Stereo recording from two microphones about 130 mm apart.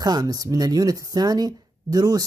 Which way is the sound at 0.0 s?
30° right (ahead or behind).